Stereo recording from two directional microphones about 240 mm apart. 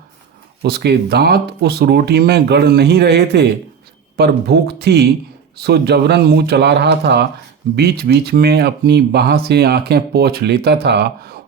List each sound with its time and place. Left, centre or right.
0.6 s speech: right